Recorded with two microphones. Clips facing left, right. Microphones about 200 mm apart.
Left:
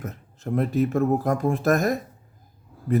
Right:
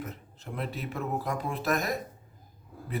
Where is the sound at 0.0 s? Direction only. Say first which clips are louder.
Left 6 dB; 45° left (ahead or behind).